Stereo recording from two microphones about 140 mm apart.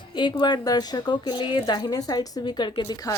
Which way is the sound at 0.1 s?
30° left (ahead or behind).